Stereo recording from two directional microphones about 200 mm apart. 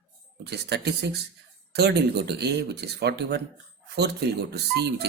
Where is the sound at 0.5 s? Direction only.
55° right (ahead or behind).